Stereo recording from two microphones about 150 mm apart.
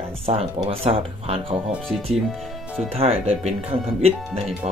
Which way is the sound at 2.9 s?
45° right (ahead or behind).